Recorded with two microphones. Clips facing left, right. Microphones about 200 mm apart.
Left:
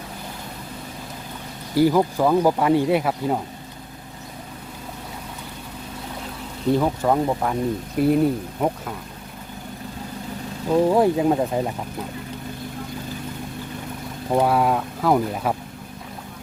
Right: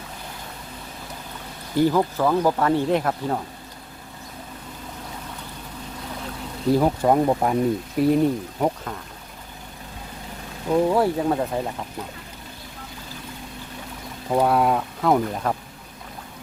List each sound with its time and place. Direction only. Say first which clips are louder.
1.7 s speech: left 2 dB; 10° left (ahead or behind)
6.7 s speech: right 2 dB; 15° right (ahead or behind)
7.9 s speech: left 1 dB; centre (ahead or behind)
10.7 s speech: left 2 dB; 15° left (ahead or behind)
14.3 s speech: even; centre (ahead or behind)